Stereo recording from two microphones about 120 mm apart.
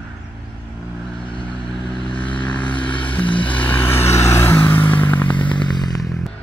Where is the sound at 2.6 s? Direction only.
45° left (ahead or behind).